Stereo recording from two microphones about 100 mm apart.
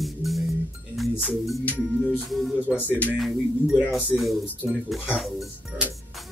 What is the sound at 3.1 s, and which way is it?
Speech, 5° right (ahead or behind).